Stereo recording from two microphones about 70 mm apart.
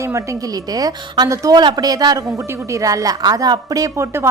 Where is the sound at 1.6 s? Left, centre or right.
Right.